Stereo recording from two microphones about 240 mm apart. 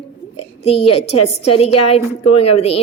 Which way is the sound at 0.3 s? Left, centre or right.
Left.